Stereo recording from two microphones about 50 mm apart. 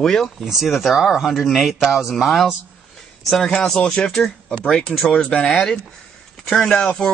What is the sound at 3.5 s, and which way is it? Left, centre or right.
Speech, centre.